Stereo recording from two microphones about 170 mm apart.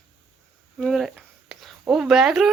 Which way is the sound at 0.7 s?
Centre (ahead or behind).